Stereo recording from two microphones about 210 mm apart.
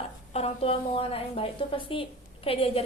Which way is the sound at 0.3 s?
30° left (ahead or behind).